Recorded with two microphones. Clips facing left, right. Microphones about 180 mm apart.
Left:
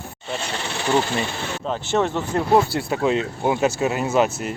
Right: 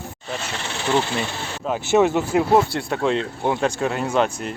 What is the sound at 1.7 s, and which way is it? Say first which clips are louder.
Speech: right 5 dB; 10° right (ahead or behind).